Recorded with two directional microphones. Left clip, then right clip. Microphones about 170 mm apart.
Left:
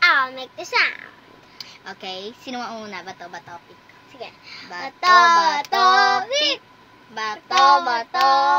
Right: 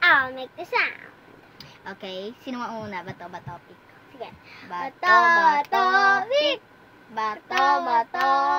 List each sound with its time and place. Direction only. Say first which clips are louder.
0.0 s a sound: left 2 dB; 15° left (ahead or behind)
1.6 s a woman's voice: left 3 dB; 10° right (ahead or behind)
4.2 s a woman's voice: left 3 dB; 20° left (ahead or behind)
4.8 s child singing: left 4 dB; 15° left (ahead or behind)